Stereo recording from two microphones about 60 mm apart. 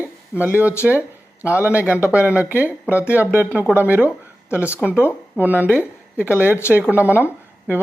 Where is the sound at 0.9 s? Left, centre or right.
Left.